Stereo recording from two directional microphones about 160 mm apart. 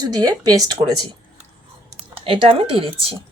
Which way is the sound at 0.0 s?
25° right (ahead or behind).